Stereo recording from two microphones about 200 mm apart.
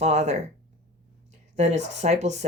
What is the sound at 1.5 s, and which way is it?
Speech, 35° right (ahead or behind).